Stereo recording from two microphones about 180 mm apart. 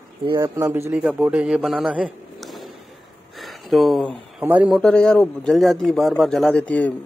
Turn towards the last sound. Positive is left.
turn(degrees=5)  # may be behind; listen again after turning